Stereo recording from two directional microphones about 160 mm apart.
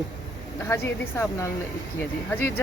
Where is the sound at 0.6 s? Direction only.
15° left (ahead or behind).